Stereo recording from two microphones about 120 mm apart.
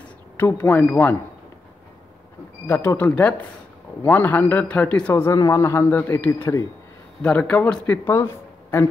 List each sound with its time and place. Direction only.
0.4 s a man's voice: 15° left (ahead or behind)
2.6 s a man's voice: 20° left (ahead or behind)